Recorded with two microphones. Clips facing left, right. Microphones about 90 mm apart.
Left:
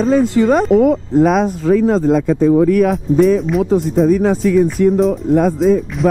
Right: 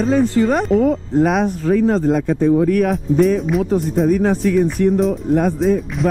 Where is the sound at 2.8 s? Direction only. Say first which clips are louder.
Left 3 dB; centre (ahead or behind).